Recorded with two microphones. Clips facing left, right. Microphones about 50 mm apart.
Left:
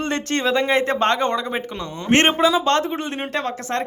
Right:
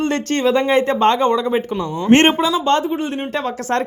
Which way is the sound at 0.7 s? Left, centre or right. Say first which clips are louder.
Right 4 dB; left.